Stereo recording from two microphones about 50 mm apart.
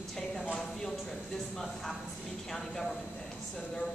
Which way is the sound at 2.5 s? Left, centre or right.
Centre.